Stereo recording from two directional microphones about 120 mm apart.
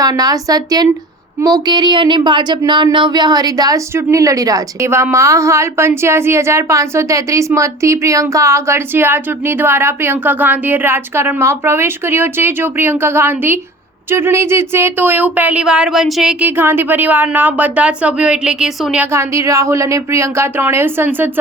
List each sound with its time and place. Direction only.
0.0 s speech: 30° right (ahead or behind); by 16.3 s centre (ahead or behind)
16.4 s speech: 15° right (ahead or behind)
19.1 s speech: 25° right (ahead or behind)